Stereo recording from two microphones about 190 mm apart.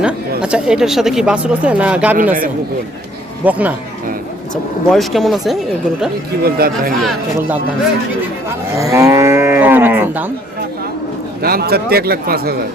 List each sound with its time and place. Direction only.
0.0 s a woman's voice: 5° right (ahead or behind)
3.4 s moo: 10° right (ahead or behind)
4.9 s a woman's voice: centre (ahead or behind)
6.4 s speech: 50° right (ahead or behind)
8.8 s moo: 15° right (ahead or behind)
11.4 s speech: 55° right (ahead or behind)